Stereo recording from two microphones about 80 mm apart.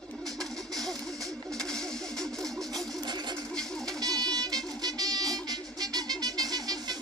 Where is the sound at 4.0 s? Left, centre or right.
Right.